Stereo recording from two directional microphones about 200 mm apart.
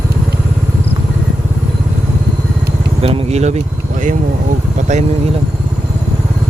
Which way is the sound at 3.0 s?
30° right (ahead or behind).